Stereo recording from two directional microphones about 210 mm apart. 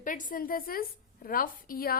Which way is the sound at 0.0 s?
40° left (ahead or behind).